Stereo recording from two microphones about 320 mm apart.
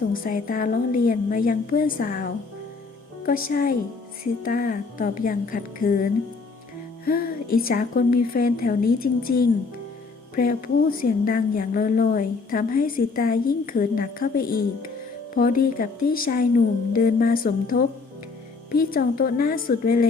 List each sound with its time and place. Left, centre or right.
0.1 s a woman's voice: left